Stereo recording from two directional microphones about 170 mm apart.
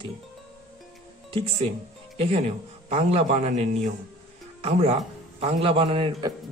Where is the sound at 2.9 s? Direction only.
40° right (ahead or behind).